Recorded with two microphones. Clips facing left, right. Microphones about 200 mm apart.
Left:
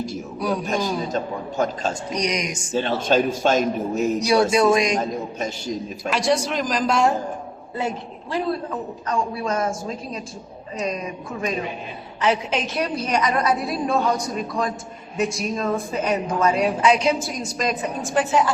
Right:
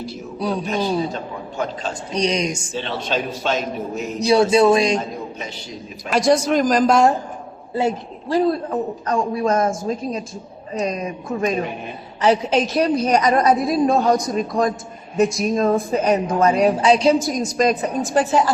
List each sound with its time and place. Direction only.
0.3 s a man's voice: 25° right (ahead or behind)
1.1 s a man's voice: 45° left (ahead or behind)
2.1 s a woman's voice: 30° right (ahead or behind)
2.7 s a man's voice: 45° left (ahead or behind)
4.2 s a woman's voice: 25° right (ahead or behind)
6.1 s speech: 45° right (ahead or behind)
7.8 s a woman's voice: 30° right (ahead or behind)
12.2 s a woman's voice: 35° right (ahead or behind)